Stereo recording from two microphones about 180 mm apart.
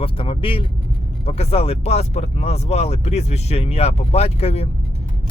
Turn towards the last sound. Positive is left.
turn(degrees=35)  # may be behind; listen again after turning